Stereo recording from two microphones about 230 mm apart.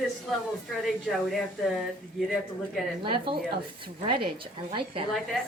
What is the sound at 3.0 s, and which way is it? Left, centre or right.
A woman's voice, right.